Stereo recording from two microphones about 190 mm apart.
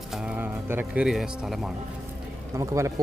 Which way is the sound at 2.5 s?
15° right (ahead or behind).